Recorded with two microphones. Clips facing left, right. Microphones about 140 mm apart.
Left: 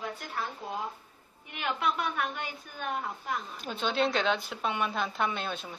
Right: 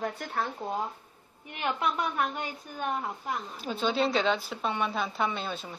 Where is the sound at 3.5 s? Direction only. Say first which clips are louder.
Right 2 dB; centre (ahead or behind).